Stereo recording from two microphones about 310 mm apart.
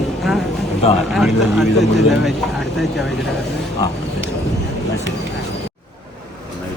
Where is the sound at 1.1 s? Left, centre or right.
Centre.